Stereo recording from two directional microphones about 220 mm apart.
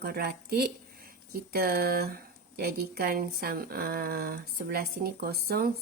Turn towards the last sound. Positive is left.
turn(degrees=-45)  # may be behind; listen again after turning